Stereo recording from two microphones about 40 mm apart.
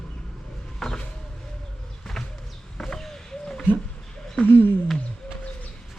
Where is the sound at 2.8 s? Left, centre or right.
Centre.